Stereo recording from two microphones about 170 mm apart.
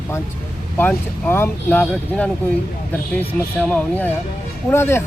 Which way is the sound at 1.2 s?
15° left (ahead or behind).